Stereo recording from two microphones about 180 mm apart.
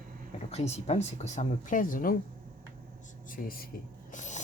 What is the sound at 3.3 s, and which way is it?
Speech, 55° left (ahead or behind).